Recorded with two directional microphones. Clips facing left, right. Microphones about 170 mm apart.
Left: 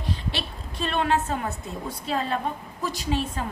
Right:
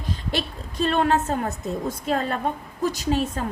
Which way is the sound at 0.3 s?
40° right (ahead or behind).